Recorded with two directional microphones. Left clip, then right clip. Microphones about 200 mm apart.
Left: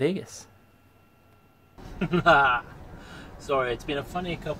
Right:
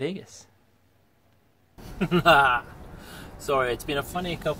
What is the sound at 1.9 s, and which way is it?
Speech, 15° right (ahead or behind).